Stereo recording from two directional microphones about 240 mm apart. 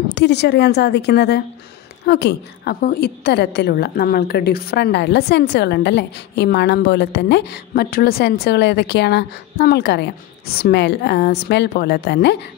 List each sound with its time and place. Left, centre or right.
0.1 s a woman's voice: left